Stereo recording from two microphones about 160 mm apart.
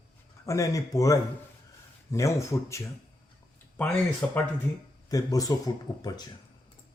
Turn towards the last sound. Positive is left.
turn(degrees=25)  # may be behind; listen again after turning